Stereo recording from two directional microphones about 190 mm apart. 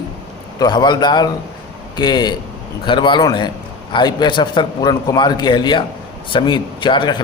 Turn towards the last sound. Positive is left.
turn(degrees=25)  # may be behind; listen again after turning